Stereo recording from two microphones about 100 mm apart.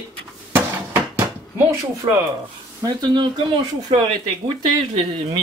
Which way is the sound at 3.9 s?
75° right (ahead or behind).